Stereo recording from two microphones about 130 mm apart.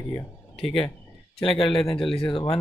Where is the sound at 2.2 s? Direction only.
40° left (ahead or behind).